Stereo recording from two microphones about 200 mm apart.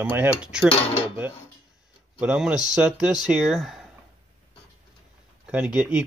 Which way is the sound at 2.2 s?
5° right (ahead or behind).